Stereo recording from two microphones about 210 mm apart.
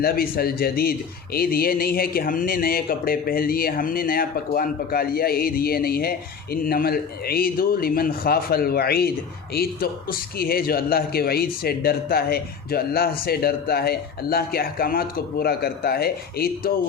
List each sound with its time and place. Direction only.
0.0 s speech: 45° left (ahead or behind)